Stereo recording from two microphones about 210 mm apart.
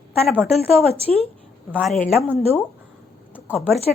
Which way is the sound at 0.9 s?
30° right (ahead or behind).